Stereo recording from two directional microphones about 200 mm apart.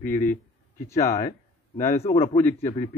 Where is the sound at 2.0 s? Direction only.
30° left (ahead or behind).